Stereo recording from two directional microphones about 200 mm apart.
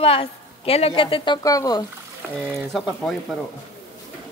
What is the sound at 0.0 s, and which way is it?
A woman's voice, 30° left (ahead or behind).